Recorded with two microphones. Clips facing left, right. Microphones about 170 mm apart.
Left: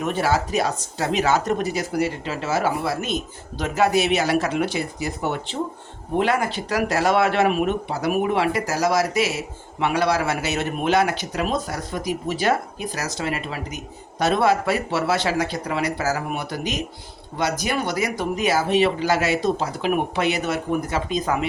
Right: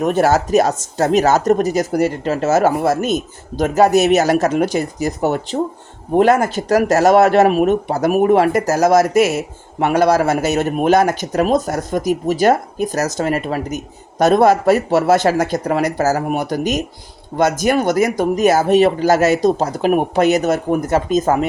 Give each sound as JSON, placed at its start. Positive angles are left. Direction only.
{"t": 0.0, "sound": "speech", "side_deg": -45}